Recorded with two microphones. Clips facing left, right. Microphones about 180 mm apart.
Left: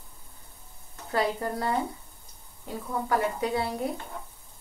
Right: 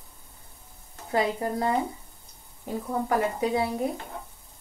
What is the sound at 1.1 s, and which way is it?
Speech, 15° right (ahead or behind).